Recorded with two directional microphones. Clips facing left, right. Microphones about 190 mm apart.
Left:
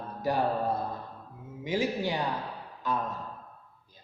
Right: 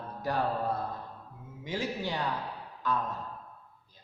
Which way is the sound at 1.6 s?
10° left (ahead or behind).